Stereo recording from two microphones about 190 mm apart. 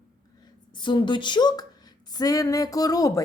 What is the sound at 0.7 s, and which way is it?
A woman's voice, 25° left (ahead or behind).